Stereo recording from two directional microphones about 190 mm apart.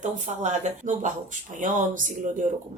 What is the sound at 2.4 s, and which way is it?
Speech, 40° right (ahead or behind).